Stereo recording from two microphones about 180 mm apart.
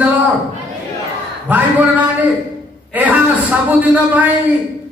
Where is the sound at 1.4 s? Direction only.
10° right (ahead or behind).